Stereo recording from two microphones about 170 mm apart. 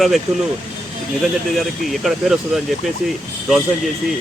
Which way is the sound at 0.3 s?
15° right (ahead or behind).